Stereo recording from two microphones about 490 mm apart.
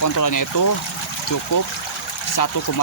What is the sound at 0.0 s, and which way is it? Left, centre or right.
Speech, left.